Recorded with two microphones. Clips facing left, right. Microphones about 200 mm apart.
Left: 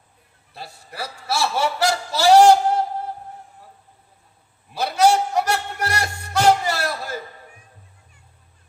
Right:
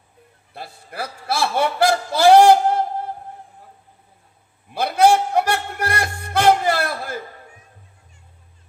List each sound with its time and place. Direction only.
0.5 s a man's voice: 55° right (ahead or behind)
4.7 s music: 55° right (ahead or behind)